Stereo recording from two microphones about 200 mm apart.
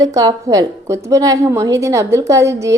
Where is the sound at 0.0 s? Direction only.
15° right (ahead or behind).